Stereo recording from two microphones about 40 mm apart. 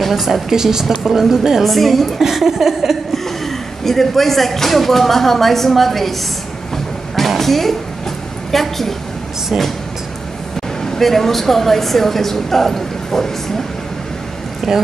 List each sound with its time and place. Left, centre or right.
0.1 s a woman's voice: centre
1.6 s speech: centre
2.2 s speech: centre
3.4 s speech: centre
7.2 s a sound: centre
8.5 s speech: centre
10.8 s a woman's voice: centre
14.7 s a woman's voice: centre